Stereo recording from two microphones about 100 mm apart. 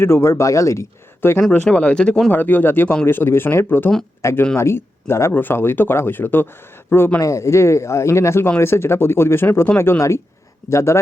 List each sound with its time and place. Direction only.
0.0 s speech: 25° left (ahead or behind)
1.7 s speech: 10° left (ahead or behind)
2.3 s speech: 20° left (ahead or behind)